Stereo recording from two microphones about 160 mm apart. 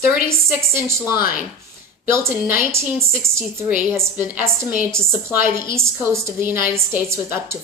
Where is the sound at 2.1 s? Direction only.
15° right (ahead or behind).